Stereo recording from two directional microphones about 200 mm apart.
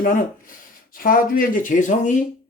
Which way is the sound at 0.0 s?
45° left (ahead or behind).